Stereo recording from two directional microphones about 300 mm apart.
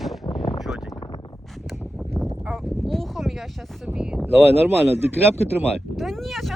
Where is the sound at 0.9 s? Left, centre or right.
Centre.